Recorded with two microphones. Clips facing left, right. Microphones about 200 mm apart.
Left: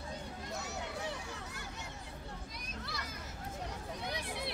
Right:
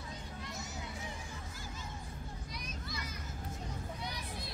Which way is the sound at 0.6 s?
65° left (ahead or behind).